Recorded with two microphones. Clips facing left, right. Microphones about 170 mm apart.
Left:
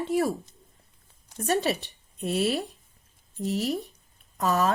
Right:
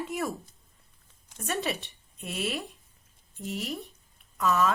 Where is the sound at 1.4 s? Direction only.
35° left (ahead or behind).